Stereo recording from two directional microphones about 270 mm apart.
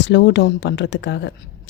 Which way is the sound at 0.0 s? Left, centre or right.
Left.